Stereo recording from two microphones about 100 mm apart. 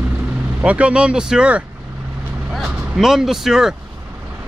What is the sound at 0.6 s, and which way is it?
Speech, 10° right (ahead or behind).